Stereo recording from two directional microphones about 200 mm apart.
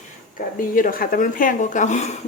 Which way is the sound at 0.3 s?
45° left (ahead or behind).